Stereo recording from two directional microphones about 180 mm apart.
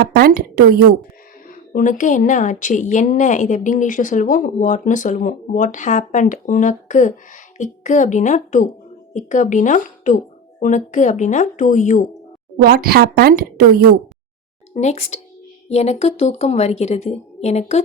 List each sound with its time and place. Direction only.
0.0 s a woman's voice: 60° right (ahead or behind)
1.5 s speech: 45° left (ahead or behind)
12.6 s a woman's voice: 55° right (ahead or behind)
14.7 s a woman's voice: 40° left (ahead or behind)